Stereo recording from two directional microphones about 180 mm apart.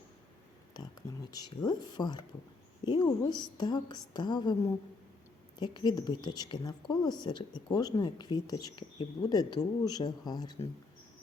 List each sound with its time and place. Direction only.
0.7 s a sound: 25° left (ahead or behind)
1.3 s speech: 20° left (ahead or behind)
5.5 s speech: 25° left (ahead or behind)